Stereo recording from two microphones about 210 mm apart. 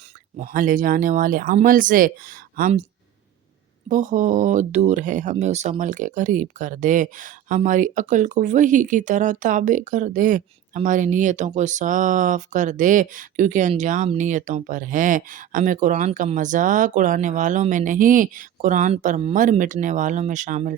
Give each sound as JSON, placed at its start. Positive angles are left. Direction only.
{"t": 0.3, "sound": "speech", "side_deg": -40}
{"t": 3.8, "sound": "speech", "side_deg": -40}